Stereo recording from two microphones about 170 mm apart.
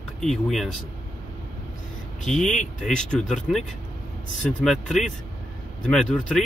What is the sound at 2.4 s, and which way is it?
Speech, 45° left (ahead or behind).